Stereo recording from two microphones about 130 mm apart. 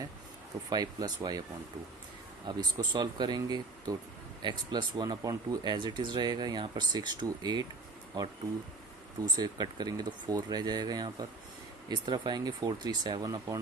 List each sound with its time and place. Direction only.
0.7 s speech: 30° right (ahead or behind)
2.5 s speech: 35° right (ahead or behind)
9.2 s speech: 30° right (ahead or behind)